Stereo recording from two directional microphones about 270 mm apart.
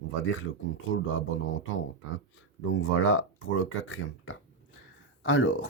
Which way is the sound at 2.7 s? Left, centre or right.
Left.